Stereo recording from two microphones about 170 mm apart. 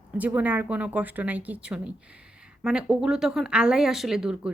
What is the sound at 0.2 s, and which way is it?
A woman's voice, 10° right (ahead or behind).